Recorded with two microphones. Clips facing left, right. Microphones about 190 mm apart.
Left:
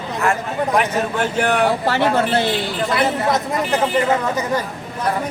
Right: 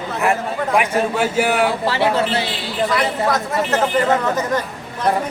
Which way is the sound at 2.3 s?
50° left (ahead or behind).